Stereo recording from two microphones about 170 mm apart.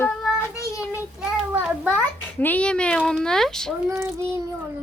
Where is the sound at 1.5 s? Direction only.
10° right (ahead or behind).